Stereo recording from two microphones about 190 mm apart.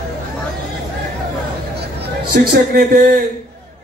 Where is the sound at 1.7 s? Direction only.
55° right (ahead or behind).